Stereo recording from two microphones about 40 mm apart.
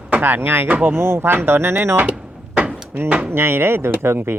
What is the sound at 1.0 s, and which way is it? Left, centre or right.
Speech, right.